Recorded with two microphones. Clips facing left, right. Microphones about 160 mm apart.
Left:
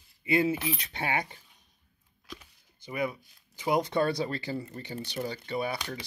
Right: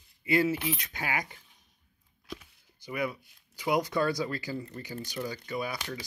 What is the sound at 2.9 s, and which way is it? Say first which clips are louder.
Speech: left 1 dB; 25° left (ahead or behind).